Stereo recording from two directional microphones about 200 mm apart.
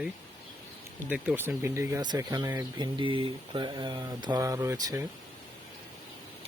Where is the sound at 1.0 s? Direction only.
10° right (ahead or behind).